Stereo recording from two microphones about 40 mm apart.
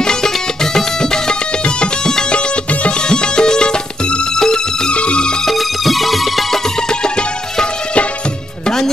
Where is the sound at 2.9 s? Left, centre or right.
Left.